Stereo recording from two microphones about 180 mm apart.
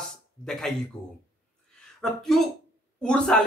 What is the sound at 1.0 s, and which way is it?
Speech, 20° left (ahead or behind).